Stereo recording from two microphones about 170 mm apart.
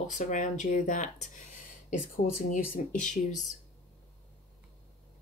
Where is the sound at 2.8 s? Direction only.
45° left (ahead or behind).